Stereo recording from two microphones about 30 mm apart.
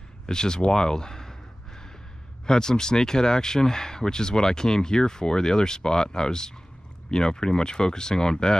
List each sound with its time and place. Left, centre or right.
0.3 s speech: left
0.7 s a sound: left
2.4 s speech: left